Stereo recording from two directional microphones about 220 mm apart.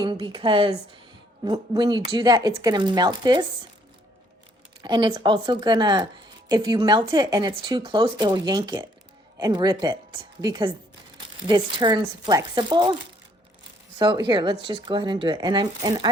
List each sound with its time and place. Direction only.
0.0 s speech: 20° right (ahead or behind)
4.8 s speech: 20° right (ahead or behind)
14.0 s speech: 20° right (ahead or behind)